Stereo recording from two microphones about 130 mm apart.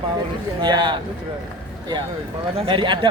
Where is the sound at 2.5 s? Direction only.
45° right (ahead or behind).